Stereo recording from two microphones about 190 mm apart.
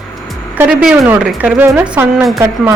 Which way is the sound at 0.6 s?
5° right (ahead or behind).